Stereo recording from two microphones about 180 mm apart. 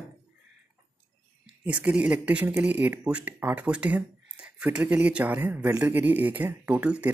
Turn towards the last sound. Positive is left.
turn(degrees=-5)  # may be behind; listen again after turning